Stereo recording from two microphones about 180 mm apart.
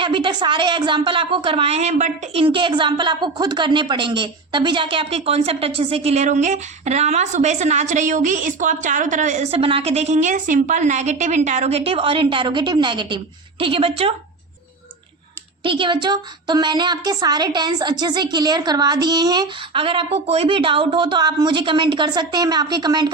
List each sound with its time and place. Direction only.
0.0 s speech: 25° right (ahead or behind)
2.4 s a woman's voice: 30° right (ahead or behind)
15.6 s speech: 30° right (ahead or behind)